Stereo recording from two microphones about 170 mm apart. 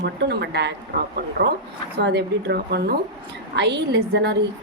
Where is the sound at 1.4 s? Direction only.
70° right (ahead or behind).